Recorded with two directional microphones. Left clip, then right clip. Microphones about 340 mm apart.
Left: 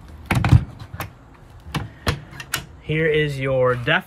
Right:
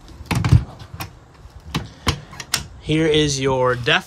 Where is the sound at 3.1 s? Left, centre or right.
Centre.